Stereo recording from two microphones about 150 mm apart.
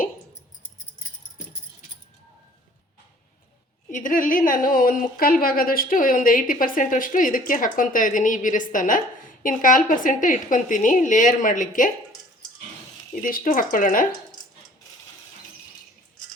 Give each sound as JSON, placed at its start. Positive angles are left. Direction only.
{"t": 3.8, "sound": "a woman's voice", "side_deg": 60}
{"t": 13.2, "sound": "a woman's voice", "side_deg": 60}